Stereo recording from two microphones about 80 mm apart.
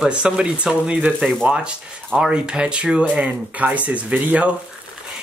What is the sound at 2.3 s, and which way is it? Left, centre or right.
Speech, centre.